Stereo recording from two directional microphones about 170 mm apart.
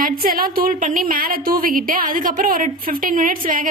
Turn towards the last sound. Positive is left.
turn(degrees=-55)  # may be behind; listen again after turning